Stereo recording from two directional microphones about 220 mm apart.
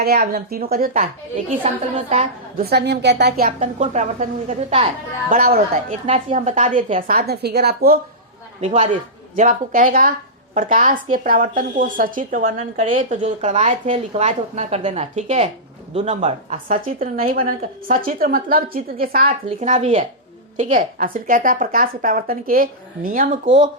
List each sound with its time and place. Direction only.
0.0 s speech: 45° right (ahead or behind)
1.6 s speech: 30° right (ahead or behind)
2.6 s speech: 50° right (ahead or behind)
3.6 s speech: 30° right (ahead or behind)
5.3 s speech: 40° right (ahead or behind)
6.1 s speech: 30° right (ahead or behind); by 7.9 s 45° right (ahead or behind)
8.6 s speech: 30° right (ahead or behind)
19.5 s speech: 30° right (ahead or behind)